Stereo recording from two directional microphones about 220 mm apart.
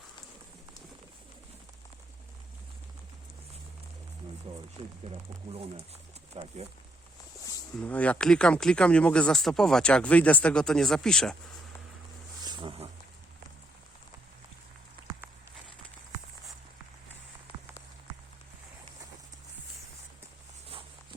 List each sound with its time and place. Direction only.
6.3 s speech: 30° right (ahead or behind)
7.8 s speech: 5° left (ahead or behind)
12.4 s a sound: 20° right (ahead or behind)
20.7 s walk: 25° right (ahead or behind)